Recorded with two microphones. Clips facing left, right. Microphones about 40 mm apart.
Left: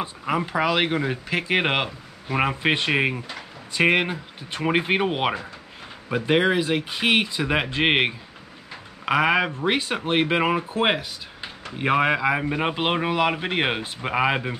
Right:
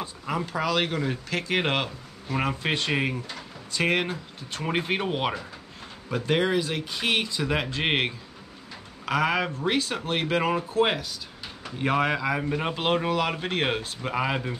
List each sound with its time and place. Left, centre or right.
0.0 s speech: left